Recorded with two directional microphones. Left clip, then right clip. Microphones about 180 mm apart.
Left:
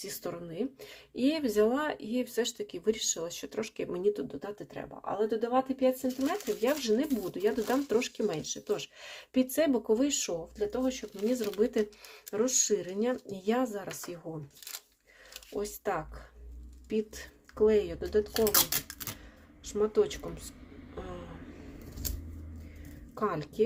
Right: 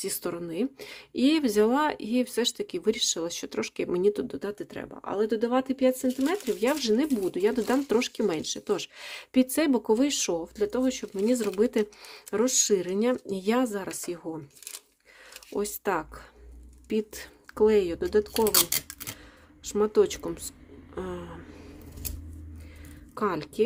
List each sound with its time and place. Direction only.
0.0 s speech: 40° right (ahead or behind)
15.5 s speech: 45° right (ahead or behind)
18.3 s speech: 15° right (ahead or behind)
19.6 s speech: 45° right (ahead or behind)
20.9 s a sound: 50° right (ahead or behind)
23.1 s speech: 40° right (ahead or behind)